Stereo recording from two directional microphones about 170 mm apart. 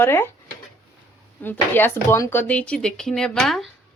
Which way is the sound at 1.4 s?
10° left (ahead or behind).